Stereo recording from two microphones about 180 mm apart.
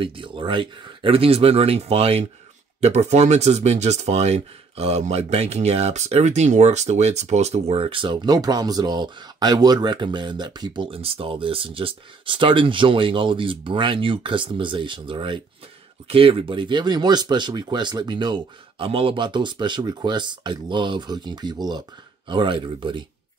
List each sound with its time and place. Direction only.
0.0 s speech: 30° right (ahead or behind)